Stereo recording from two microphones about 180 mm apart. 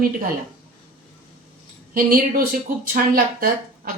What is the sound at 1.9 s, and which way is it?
Speech, 50° right (ahead or behind).